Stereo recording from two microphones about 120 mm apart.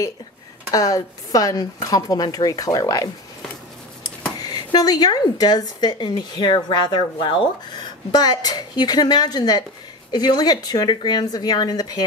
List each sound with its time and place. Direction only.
0.7 s speech: 30° left (ahead or behind)
4.4 s a sound: 35° left (ahead or behind)
4.7 s speech: 35° left (ahead or behind)